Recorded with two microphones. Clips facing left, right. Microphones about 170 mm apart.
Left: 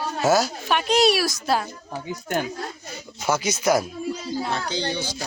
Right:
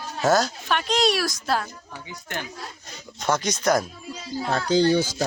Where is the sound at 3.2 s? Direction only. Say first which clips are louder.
Left 1 dB; 5° left (ahead or behind).